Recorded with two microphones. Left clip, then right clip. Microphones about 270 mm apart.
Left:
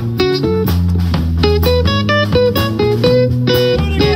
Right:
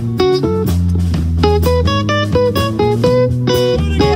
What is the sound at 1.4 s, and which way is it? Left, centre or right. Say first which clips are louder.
Music: even; centre.